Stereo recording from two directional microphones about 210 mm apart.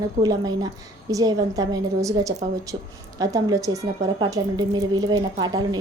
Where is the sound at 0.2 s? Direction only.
20° right (ahead or behind).